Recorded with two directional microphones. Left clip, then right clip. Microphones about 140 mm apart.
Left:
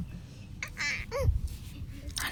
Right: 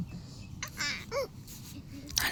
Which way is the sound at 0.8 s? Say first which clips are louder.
Left 1 dB; 5° left (ahead or behind).